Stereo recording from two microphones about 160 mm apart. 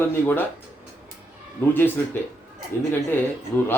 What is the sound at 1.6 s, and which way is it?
Speech, 10° left (ahead or behind).